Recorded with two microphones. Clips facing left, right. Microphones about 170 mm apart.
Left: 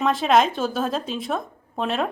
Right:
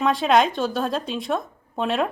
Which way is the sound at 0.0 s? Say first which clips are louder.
Even; centre (ahead or behind).